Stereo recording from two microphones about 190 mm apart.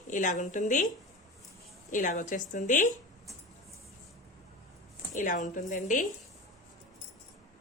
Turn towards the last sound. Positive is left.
turn(degrees=40)  # may be behind; listen again after turning